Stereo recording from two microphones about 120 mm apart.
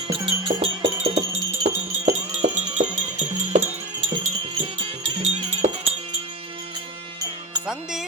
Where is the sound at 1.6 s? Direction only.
70° right (ahead or behind).